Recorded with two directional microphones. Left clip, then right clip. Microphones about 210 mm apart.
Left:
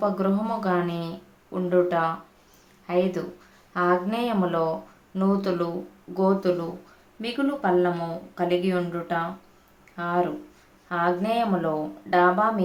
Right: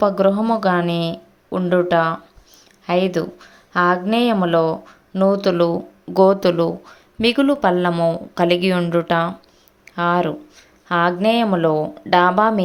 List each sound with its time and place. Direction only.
0.0 s speech: 35° right (ahead or behind)
6.1 s speech: 45° right (ahead or behind)